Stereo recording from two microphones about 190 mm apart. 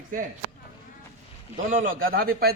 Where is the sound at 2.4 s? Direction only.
50° right (ahead or behind).